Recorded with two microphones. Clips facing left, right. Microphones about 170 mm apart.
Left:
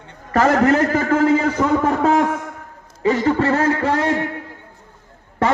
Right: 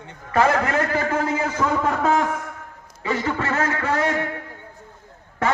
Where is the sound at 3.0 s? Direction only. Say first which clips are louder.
Left 8 dB; 40° left (ahead or behind).